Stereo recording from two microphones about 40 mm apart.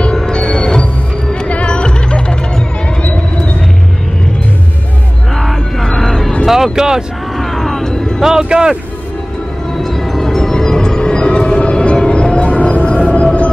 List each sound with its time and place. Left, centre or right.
0.2 s music: centre
1.5 s music: left
5.3 s music: centre
6.0 s vehicle: centre
6.4 s speech: centre
7.3 s a sound: centre
8.2 s speech: centre
9.8 s music: centre; by 13.5 s left